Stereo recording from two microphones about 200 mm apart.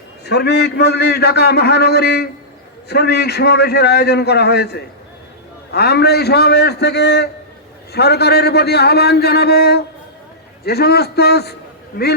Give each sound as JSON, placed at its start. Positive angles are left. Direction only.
{"t": 0.3, "sound": "a man's voice", "side_deg": 55}